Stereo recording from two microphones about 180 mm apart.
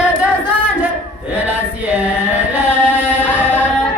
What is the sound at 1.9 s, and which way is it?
Music, 10° right (ahead or behind).